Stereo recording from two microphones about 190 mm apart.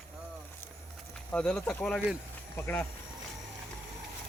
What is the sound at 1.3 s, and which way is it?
Speech, 5° left (ahead or behind).